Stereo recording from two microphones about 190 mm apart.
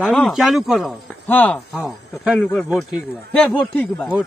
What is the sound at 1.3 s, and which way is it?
Speech, 10° left (ahead or behind).